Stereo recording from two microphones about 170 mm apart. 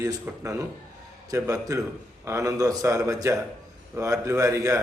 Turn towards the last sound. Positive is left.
turn(degrees=-15)  # may be behind; listen again after turning